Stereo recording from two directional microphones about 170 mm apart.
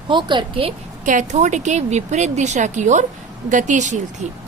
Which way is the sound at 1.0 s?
45° right (ahead or behind).